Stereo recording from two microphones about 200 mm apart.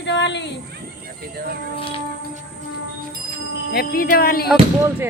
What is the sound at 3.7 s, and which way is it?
Speech, 50° left (ahead or behind).